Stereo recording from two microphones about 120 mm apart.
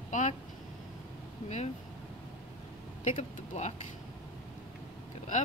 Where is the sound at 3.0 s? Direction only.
80° left.